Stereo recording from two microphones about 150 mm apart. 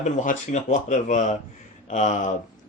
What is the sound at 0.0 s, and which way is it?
Speech, 55° left (ahead or behind).